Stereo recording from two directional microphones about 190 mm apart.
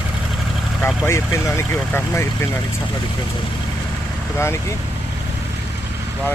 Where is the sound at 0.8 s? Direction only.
15° left (ahead or behind).